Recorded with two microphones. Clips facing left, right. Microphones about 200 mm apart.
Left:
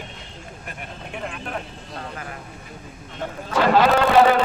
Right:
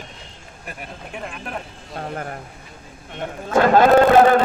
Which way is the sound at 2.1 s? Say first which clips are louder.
Right 6 dB; 50° right (ahead or behind).